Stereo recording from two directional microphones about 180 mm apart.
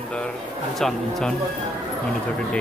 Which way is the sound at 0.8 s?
Centre (ahead or behind).